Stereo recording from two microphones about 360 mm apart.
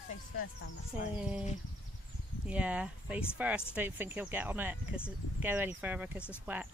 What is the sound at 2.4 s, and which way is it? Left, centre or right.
Speech, centre.